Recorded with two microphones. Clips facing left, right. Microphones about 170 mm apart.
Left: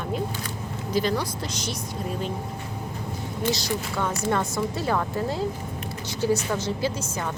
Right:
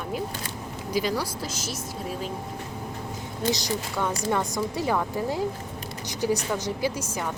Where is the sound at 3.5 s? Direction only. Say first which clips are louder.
Even; 20° right (ahead or behind).